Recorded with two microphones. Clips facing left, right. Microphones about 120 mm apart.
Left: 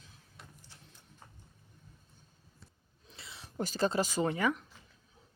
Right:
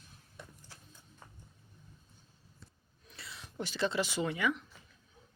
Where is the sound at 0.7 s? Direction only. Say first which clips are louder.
Right 2 dB; 90° right.